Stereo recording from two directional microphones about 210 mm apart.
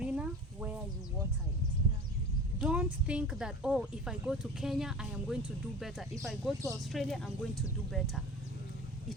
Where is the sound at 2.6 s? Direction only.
5° right (ahead or behind).